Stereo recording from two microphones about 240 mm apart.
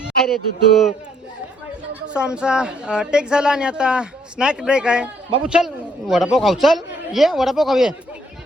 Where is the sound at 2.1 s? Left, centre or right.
Centre.